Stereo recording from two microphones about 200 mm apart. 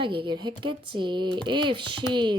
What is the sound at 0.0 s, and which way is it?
Speech, 25° right (ahead or behind).